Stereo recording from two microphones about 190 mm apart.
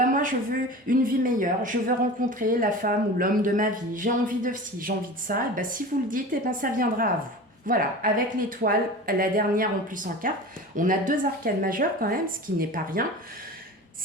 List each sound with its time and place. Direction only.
0.0 s speech: 45° right (ahead or behind)